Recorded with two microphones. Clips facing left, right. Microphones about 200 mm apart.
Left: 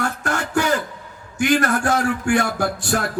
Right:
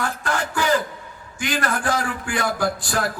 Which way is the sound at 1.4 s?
45° left (ahead or behind).